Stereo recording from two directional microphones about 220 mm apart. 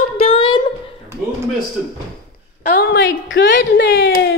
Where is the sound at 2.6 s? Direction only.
45° left (ahead or behind).